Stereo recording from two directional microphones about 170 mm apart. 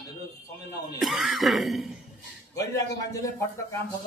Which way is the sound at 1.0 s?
Centre (ahead or behind).